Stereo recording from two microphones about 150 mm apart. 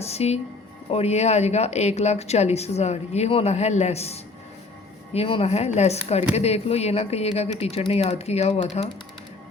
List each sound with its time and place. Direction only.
0.0 s speech: 45° left (ahead or behind)